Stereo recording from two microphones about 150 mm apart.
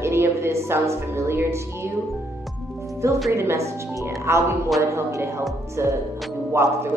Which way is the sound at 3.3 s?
15° right (ahead or behind).